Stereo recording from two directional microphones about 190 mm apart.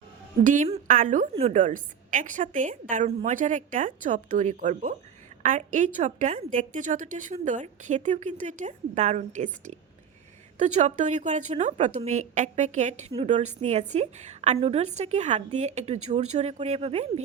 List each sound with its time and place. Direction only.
0.4 s a woman's voice: 40° right (ahead or behind)